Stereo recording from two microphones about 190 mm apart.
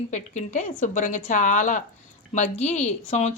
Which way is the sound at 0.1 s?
40° left (ahead or behind).